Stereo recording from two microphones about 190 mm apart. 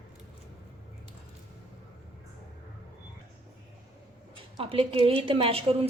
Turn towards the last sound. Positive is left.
turn(degrees=-30)  # may be behind; listen again after turning